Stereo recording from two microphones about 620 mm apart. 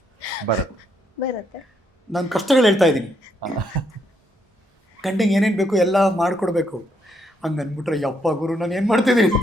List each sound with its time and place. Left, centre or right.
0.5 s speech: right
2.1 s speech: centre
3.4 s cough: right
4.9 s speech: centre